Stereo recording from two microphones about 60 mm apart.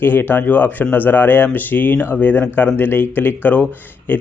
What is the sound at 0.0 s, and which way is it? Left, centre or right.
A man's voice, left.